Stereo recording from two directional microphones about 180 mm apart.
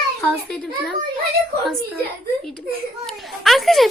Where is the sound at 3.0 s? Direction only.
Centre (ahead or behind).